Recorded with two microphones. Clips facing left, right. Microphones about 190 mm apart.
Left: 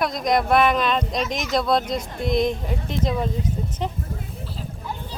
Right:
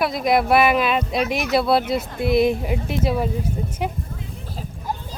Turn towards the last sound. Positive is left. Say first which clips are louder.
# right 2 dB
turn(degrees=-45)  # may be behind; listen again after turning